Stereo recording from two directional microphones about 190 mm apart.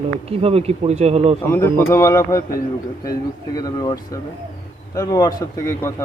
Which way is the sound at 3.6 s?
20° left (ahead or behind).